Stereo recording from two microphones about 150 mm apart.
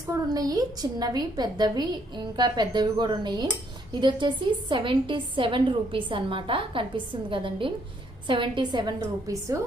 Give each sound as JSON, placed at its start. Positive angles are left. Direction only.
{"t": 0.1, "sound": "a woman's voice", "side_deg": -25}